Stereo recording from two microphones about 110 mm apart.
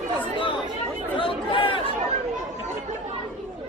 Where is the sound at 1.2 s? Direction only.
50° left (ahead or behind).